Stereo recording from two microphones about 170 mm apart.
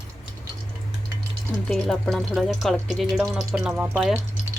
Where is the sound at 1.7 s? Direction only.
Centre (ahead or behind).